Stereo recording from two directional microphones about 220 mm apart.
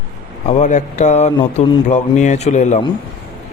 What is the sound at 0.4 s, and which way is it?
Speech, 35° left (ahead or behind).